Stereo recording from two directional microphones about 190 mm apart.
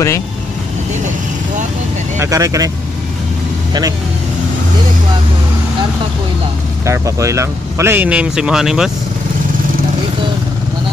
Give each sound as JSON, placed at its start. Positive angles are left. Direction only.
{"t": 2.1, "sound": "speech", "side_deg": -15}
{"t": 6.9, "sound": "speech", "side_deg": -15}